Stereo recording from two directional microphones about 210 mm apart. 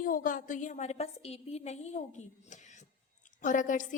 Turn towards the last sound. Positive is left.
turn(degrees=40)  # may be behind; listen again after turning